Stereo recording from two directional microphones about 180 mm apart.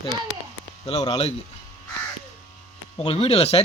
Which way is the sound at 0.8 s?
20° left (ahead or behind).